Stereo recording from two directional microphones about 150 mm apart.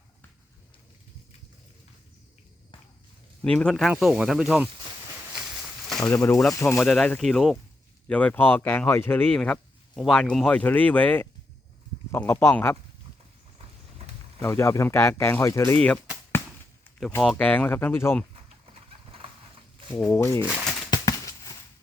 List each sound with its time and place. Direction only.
3.4 s speech: 5° left (ahead or behind)
6.0 s speech: 20° left (ahead or behind)
6.7 s speech: 5° left (ahead or behind)
14.4 s speech: 20° left (ahead or behind)
17.3 s speech: 10° left (ahead or behind)
19.9 s speech: 10° left (ahead or behind)
20.9 s a sound: 25° left (ahead or behind)